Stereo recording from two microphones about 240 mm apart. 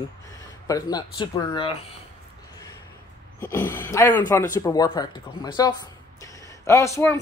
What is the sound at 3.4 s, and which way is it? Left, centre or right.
Speech, centre.